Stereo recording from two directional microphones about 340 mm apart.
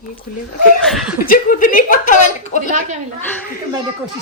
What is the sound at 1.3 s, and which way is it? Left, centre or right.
Speech, left.